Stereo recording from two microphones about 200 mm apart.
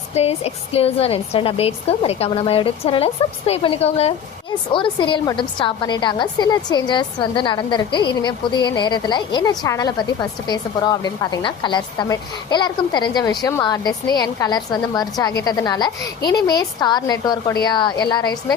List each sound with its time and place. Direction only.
0.1 s a woman's voice: 30° left (ahead or behind)